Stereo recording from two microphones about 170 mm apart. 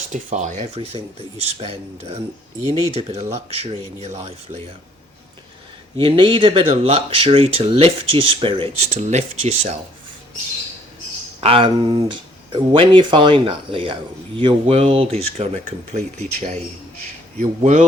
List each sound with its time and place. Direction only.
0.1 s speech: 45° right (ahead or behind)
6.0 s speech: 30° right (ahead or behind)
11.3 s speech: 35° right (ahead or behind)